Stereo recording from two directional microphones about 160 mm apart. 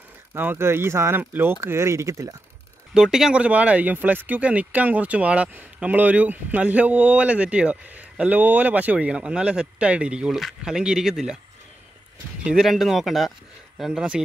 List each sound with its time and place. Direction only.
0.3 s speech: 15° right (ahead or behind)
2.9 s speech: 5° right (ahead or behind)
12.4 s speech: 5° right (ahead or behind)